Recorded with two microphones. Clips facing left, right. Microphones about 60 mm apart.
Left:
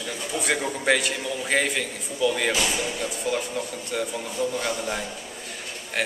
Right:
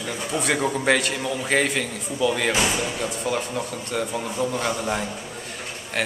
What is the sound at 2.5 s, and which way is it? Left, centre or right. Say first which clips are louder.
Speech: right 3 dB; right.